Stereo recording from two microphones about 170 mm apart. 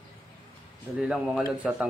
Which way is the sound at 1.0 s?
5° right (ahead or behind).